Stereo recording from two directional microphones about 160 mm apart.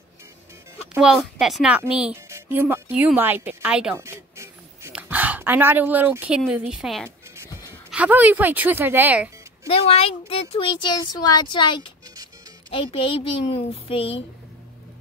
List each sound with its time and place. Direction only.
0.9 s a woman's voice: 5° right (ahead or behind)
4.0 s a sound: 15° right (ahead or behind)
7.9 s a woman's voice: 10° right (ahead or behind)
9.7 s speech: 35° left (ahead or behind)